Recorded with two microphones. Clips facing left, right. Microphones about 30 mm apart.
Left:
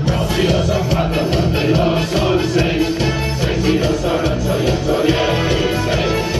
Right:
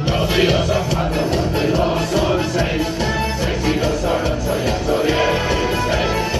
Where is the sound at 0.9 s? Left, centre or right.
Centre.